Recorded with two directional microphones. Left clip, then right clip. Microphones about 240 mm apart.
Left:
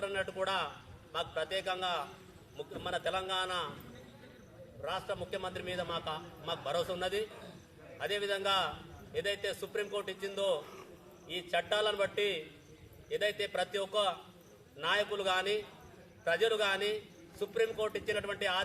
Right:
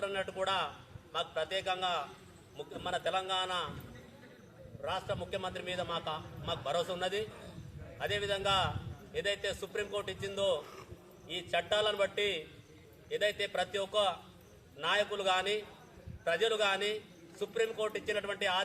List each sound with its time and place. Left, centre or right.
0.0 s a man's voice: centre
4.8 s a man's voice: centre